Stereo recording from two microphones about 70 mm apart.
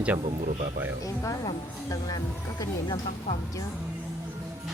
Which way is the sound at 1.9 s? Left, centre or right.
Left.